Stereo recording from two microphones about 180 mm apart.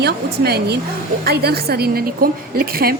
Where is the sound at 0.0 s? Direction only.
65° right (ahead or behind).